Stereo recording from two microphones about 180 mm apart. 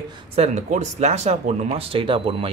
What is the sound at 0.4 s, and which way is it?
Speech, 40° right (ahead or behind).